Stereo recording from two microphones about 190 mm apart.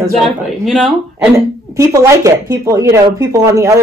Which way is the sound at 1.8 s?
15° right (ahead or behind).